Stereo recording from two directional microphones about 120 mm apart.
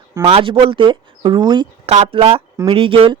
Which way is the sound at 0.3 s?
50° right (ahead or behind).